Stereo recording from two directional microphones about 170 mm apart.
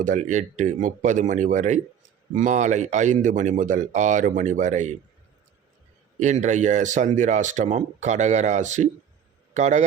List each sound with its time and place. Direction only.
0.0 s speech: 50° right (ahead or behind)
6.1 s speech: 45° right (ahead or behind)